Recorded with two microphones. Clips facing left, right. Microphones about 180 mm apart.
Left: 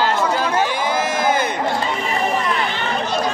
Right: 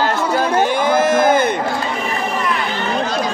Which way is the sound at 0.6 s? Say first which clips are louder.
Right 5 dB; 50° right (ahead or behind).